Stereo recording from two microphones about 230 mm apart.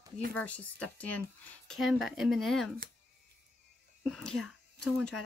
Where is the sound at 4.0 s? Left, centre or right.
Centre.